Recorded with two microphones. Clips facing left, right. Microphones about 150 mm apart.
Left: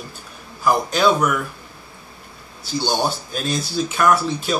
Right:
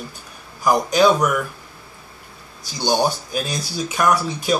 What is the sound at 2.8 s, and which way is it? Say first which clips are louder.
Speech: right 4 dB; 15° right (ahead or behind).